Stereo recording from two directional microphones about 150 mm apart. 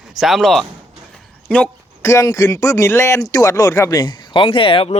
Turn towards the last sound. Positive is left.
turn(degrees=35)  # may be behind; listen again after turning